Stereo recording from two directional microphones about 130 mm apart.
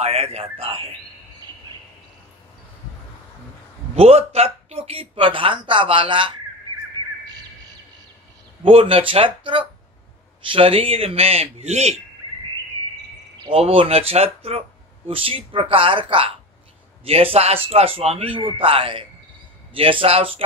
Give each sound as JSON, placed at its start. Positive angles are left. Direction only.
{"t": 0.0, "sound": "a man's voice", "side_deg": -55}
{"t": 3.9, "sound": "speech", "side_deg": -50}
{"t": 8.6, "sound": "speech", "side_deg": -45}
{"t": 13.4, "sound": "speech", "side_deg": -45}